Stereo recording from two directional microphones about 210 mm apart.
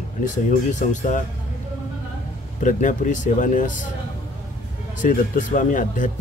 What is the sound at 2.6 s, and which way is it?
Speech, 35° left (ahead or behind).